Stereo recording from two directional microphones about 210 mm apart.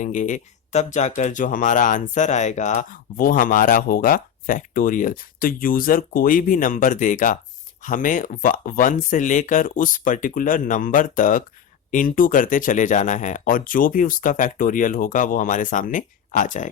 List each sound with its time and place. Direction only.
0.0 s speech: 35° left (ahead or behind)